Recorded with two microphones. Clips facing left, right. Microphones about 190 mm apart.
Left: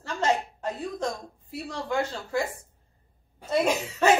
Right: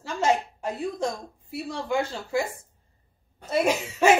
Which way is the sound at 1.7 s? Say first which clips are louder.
Right 1 dB; 10° right (ahead or behind).